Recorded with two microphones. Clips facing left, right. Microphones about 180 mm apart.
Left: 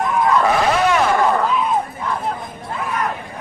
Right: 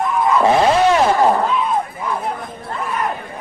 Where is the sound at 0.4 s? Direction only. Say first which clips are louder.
Right 3 dB; 30° right (ahead or behind).